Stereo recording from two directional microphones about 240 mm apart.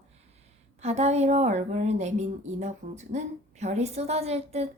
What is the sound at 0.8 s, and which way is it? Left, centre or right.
A woman's voice, right.